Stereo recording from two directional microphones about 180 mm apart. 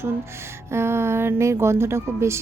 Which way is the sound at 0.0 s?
15° right (ahead or behind).